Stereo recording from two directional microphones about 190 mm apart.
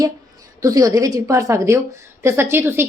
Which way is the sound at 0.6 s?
20° right (ahead or behind).